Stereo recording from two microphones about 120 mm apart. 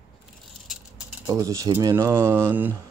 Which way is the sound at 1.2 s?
25° right (ahead or behind).